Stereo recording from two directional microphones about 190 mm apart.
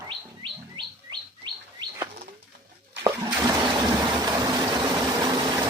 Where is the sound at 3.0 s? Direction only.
20° right (ahead or behind).